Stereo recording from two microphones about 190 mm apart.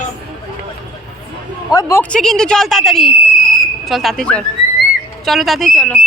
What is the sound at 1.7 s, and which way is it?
Speech, 15° left (ahead or behind).